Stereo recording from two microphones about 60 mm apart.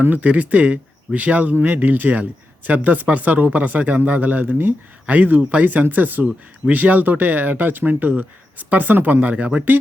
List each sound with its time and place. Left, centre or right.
0.0 s speech: right